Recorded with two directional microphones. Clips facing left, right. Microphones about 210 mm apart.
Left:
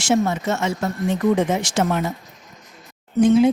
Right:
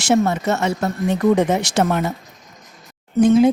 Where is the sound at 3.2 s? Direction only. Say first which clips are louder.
Right 2 dB; 45° right (ahead or behind).